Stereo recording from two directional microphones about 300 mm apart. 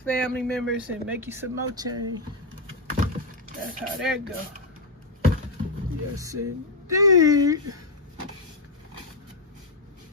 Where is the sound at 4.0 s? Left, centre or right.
Centre.